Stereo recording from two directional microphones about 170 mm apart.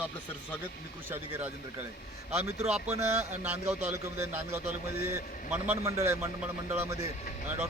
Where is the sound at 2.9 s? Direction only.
15° right (ahead or behind).